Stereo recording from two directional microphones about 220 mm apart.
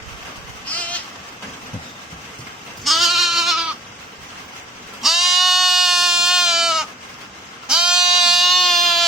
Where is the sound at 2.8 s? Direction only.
Centre (ahead or behind).